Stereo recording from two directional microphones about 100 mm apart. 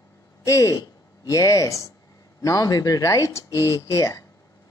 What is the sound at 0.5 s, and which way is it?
Speech, 35° left (ahead or behind).